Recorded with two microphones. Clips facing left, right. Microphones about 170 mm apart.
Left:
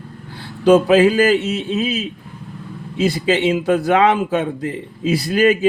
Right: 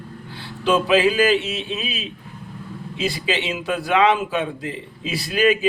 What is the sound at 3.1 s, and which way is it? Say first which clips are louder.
A man's voice: left 8 dB; 45° left (ahead or behind).